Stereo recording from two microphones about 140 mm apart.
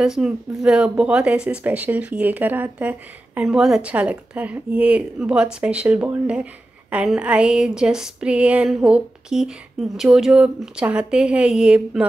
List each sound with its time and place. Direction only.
0.0 s speech: 5° right (ahead or behind)